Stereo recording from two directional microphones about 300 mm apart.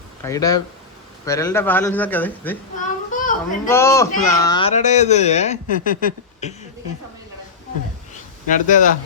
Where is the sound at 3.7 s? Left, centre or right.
Centre; by 6.6 s left.